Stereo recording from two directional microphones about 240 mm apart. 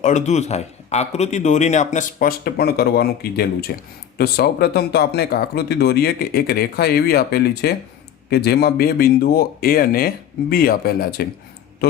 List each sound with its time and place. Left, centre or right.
0.0 s a man's voice: left